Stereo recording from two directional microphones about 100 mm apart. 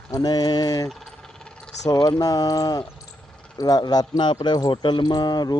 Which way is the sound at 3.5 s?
40° left (ahead or behind).